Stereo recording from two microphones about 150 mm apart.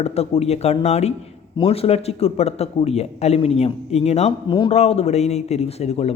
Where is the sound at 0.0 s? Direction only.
45° left (ahead or behind).